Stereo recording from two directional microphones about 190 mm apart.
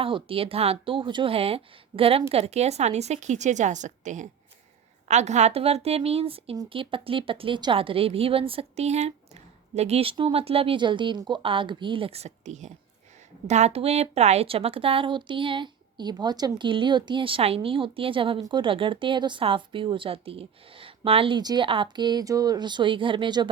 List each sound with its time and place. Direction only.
0.0 s a woman's voice: 30° right (ahead or behind)